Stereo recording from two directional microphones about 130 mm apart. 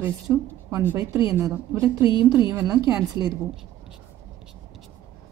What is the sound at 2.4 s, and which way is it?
Speech, 25° right (ahead or behind).